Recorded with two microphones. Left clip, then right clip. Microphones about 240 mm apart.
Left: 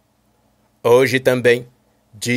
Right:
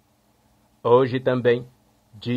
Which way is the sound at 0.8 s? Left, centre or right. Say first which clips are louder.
Left 5 dB; centre.